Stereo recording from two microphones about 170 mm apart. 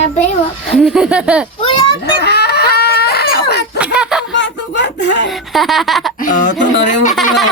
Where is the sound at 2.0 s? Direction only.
70° left (ahead or behind).